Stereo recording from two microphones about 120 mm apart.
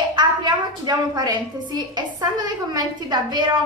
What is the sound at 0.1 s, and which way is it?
A woman's voice, 40° right (ahead or behind).